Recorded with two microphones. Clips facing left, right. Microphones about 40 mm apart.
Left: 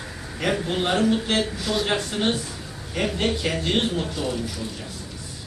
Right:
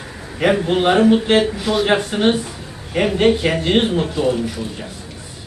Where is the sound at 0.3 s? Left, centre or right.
Right.